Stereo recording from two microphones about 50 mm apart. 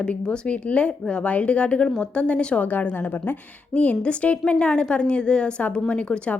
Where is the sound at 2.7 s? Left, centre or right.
Left.